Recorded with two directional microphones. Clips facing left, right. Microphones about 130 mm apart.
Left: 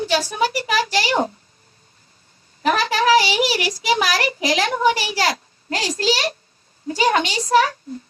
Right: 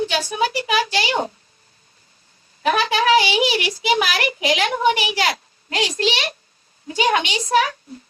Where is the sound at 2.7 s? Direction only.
35° left (ahead or behind).